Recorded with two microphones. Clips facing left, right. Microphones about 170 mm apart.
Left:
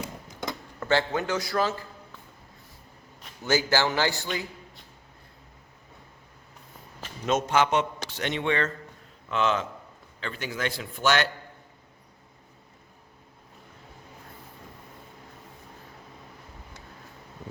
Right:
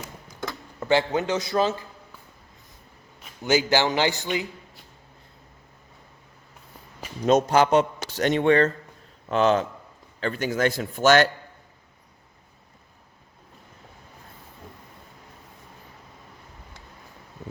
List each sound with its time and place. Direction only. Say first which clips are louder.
0.8 s a man's voice: right 3 dB; 15° right (ahead or behind)
3.4 s a man's voice: right 3 dB; 20° right (ahead or behind)
7.3 s a man's voice: right 5 dB; 35° right (ahead or behind)